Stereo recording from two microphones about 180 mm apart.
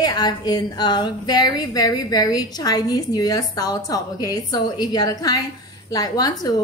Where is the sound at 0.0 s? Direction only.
20° left (ahead or behind).